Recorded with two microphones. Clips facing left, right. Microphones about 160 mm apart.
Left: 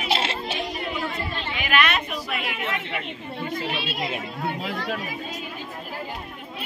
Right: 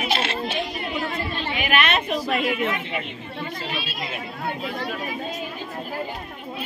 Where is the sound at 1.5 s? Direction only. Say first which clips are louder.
Right 1 dB; 20° right (ahead or behind).